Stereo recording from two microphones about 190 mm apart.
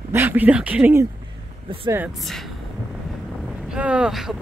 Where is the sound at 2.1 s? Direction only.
Centre (ahead or behind).